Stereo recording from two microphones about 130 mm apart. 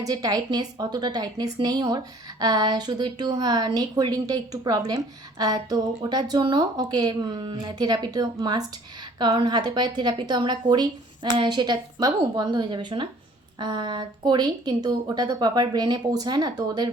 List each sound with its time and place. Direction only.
0.0 s a woman's voice: 30° right (ahead or behind)